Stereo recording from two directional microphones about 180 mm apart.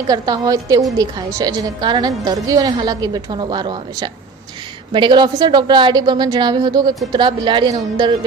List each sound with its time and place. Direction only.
0.1 s a woman's voice: 20° right (ahead or behind)